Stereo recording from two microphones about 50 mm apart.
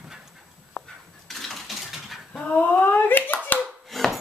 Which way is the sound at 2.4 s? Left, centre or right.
Left.